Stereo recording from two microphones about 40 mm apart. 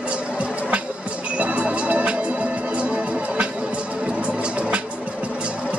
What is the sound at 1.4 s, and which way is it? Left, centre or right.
Music, right.